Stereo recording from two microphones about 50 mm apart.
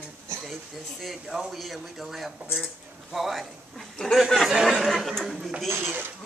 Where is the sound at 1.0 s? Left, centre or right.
Centre.